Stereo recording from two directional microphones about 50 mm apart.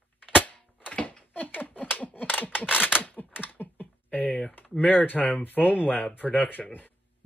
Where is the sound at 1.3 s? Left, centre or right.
Left.